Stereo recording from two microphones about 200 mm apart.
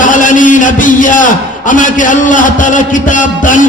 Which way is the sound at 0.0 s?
40° left (ahead or behind).